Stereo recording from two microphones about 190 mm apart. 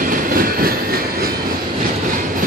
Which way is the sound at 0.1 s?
50° right (ahead or behind).